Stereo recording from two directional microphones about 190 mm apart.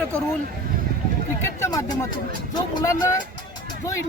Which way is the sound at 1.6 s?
20° left (ahead or behind).